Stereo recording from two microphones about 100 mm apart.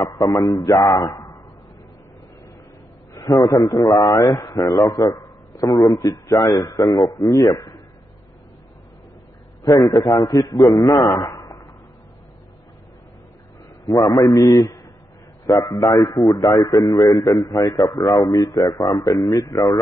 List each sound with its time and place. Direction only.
0.0 s a man's voice: 35° left (ahead or behind)
3.2 s a man's voice: 35° left (ahead or behind)
9.6 s a man's voice: 35° left (ahead or behind)
13.8 s a man's voice: 40° left (ahead or behind)